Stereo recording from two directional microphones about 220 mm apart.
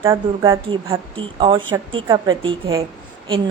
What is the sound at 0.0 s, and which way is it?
Speech, 15° right (ahead or behind).